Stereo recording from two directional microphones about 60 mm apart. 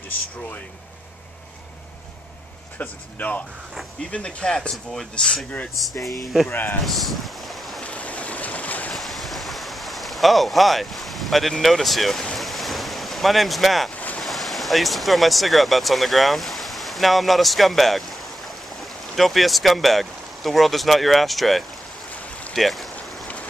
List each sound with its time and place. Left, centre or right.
2.8 s speech: left
4.1 s speech: centre
5.9 s speech: left
6.5 s speech: left
6.9 s boat: centre
7.8 s boat: left
8.9 s a sound: centre
12.4 s ocean: centre
13.9 s boat: left
14.2 s speech: centre
19.1 s speech: centre